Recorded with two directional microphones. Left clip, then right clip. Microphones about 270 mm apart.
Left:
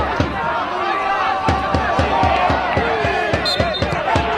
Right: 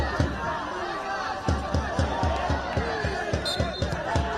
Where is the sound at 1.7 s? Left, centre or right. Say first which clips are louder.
Left 12 dB; right.